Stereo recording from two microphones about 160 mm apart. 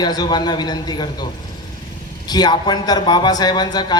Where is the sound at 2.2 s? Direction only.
25° left (ahead or behind).